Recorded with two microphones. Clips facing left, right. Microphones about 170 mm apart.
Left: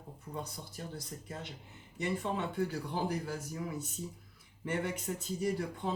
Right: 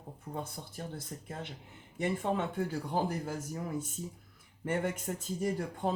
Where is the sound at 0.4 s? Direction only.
50° right (ahead or behind).